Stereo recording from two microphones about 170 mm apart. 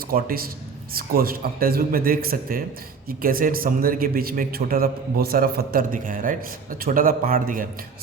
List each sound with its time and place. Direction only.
0.1 s a man's voice: 60° right (ahead or behind)